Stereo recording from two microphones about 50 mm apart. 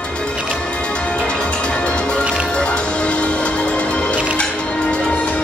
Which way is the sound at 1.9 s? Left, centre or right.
Centre.